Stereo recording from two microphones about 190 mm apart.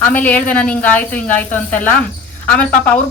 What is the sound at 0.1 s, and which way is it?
Speech, 10° left (ahead or behind).